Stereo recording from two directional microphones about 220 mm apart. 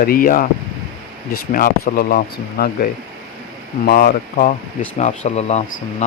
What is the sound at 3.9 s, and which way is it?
Speech, 40° left (ahead or behind).